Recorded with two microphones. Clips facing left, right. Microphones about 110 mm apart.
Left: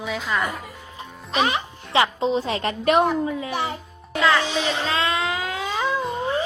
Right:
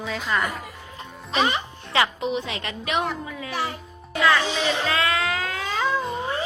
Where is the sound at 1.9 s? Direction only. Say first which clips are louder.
Left 3 dB; 25° left (ahead or behind); by 3.1 s 45° left (ahead or behind).